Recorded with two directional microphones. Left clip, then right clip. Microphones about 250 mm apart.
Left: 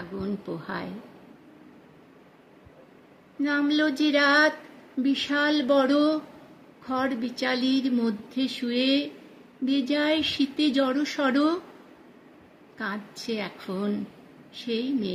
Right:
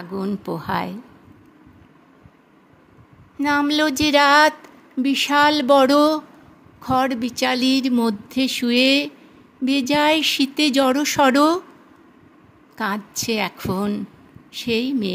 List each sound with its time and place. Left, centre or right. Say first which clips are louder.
0.2 s speech: right 7 dB; right
3.4 s a woman's voice: right 6 dB; right
12.7 s a woman's voice: right 9 dB; right